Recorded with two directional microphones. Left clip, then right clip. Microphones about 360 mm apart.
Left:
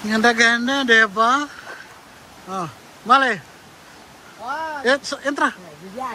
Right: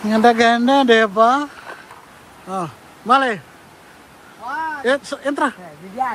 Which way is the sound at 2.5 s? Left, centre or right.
Centre.